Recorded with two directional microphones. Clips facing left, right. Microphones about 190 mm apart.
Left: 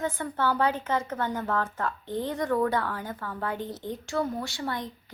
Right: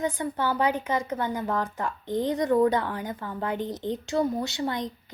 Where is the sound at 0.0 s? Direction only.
15° right (ahead or behind).